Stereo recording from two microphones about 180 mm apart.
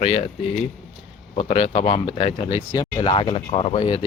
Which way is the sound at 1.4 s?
30° left (ahead or behind).